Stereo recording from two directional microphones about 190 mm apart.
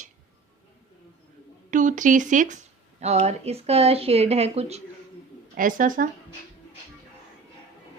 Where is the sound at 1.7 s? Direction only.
40° right (ahead or behind).